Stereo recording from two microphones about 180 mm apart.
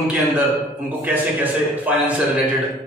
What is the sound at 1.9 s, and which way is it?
Speech, 10° right (ahead or behind).